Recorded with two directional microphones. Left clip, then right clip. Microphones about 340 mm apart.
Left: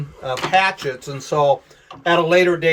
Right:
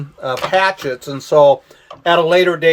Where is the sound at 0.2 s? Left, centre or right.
Right.